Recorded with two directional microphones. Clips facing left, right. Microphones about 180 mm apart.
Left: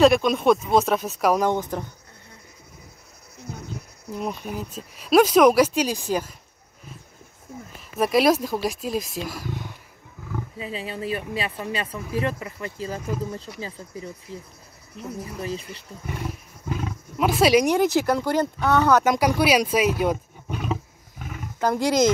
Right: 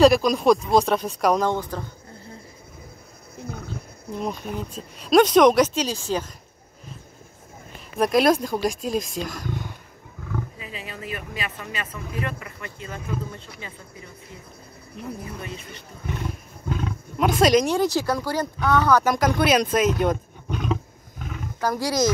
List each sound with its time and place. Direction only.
0.0 s speech: centre (ahead or behind); by 1.9 s 15° left (ahead or behind)
3.3 s a sound: 55° right (ahead or behind)
4.1 s speech: 5° left (ahead or behind)
7.9 s speech: centre (ahead or behind)
10.6 s speech: 30° left (ahead or behind)
15.4 s speech: 30° left (ahead or behind)
16.1 s wild animals: 5° left (ahead or behind)
17.6 s speech: 15° left (ahead or behind)